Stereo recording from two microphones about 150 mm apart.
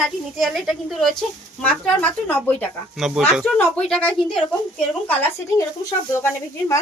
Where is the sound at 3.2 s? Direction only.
Centre (ahead or behind); by 6.8 s 20° left (ahead or behind).